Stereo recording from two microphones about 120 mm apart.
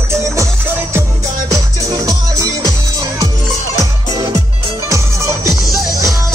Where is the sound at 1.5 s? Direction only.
30° right (ahead or behind).